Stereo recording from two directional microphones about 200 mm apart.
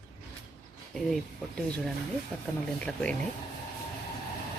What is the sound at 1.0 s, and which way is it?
Speech, centre (ahead or behind).